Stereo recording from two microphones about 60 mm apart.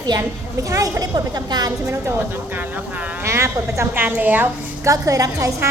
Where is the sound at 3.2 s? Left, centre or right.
Right.